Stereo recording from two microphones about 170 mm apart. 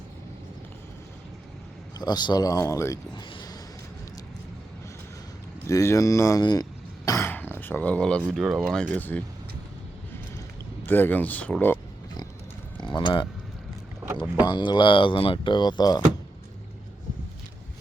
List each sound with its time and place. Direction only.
2.0 s speech: 25° left (ahead or behind)
5.6 s speech: 15° left (ahead or behind); by 8.8 s 5° right (ahead or behind)
8.8 s speech: 10° left (ahead or behind)
10.8 s speech: 10° left (ahead or behind)
12.7 s a sound: 25° left (ahead or behind)
14.4 s speech: 25° left (ahead or behind)